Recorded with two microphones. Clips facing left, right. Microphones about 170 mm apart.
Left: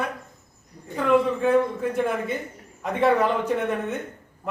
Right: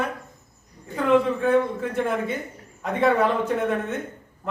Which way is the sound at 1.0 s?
5° left (ahead or behind).